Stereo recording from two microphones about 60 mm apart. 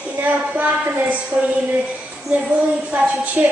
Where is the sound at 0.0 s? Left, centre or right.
Right.